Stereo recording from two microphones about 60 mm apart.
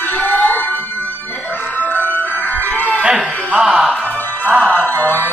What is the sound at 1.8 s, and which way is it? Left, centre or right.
Music, left.